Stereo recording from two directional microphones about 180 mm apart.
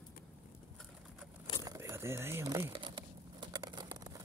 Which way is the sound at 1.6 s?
15° right (ahead or behind).